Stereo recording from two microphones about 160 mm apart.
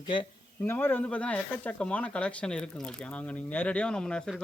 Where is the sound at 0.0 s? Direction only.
30° left (ahead or behind).